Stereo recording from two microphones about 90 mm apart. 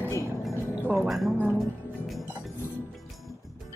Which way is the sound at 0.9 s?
Centre (ahead or behind).